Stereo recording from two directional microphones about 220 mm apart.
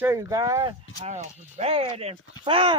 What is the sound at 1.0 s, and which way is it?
Speech, 30° right (ahead or behind).